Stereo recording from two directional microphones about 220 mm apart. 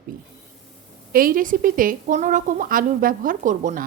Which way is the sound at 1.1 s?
40° right (ahead or behind).